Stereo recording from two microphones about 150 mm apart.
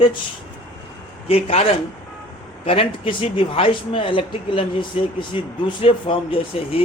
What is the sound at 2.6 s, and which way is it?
Speech, 35° left (ahead or behind).